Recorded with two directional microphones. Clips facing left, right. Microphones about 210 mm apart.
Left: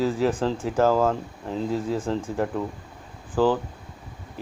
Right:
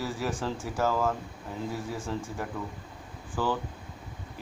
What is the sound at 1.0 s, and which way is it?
Speech, 80° left.